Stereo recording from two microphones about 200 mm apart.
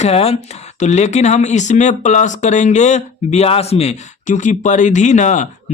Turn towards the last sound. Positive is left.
turn(degrees=35)  # may be behind; listen again after turning